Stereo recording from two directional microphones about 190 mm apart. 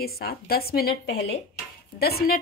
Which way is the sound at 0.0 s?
55° left (ahead or behind).